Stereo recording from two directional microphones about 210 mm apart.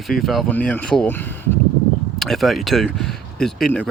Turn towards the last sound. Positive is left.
turn(degrees=5)  # may be behind; listen again after turning